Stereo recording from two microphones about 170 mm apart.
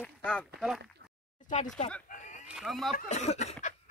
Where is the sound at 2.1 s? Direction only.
45° left (ahead or behind).